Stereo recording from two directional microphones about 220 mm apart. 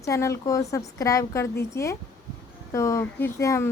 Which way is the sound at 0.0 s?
15° left (ahead or behind).